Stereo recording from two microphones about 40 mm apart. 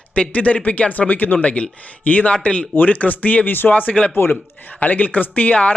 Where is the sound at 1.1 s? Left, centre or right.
Left.